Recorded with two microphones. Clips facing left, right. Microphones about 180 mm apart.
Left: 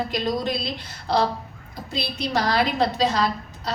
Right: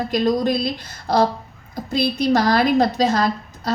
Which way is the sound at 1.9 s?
45° right (ahead or behind).